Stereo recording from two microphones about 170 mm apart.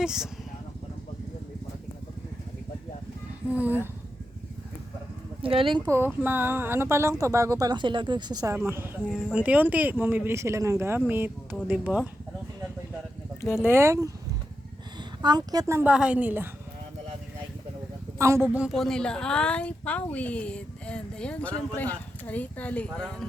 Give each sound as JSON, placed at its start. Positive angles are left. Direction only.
{"t": 0.0, "sound": "speech", "side_deg": -5}
{"t": 3.5, "sound": "speech", "side_deg": -10}
{"t": 5.4, "sound": "speech", "side_deg": -30}
{"t": 5.9, "sound": "speech", "side_deg": -10}
{"t": 13.6, "sound": "speech", "side_deg": -15}
{"t": 15.2, "sound": "speech", "side_deg": -25}
{"t": 18.2, "sound": "a woman's voice", "side_deg": -15}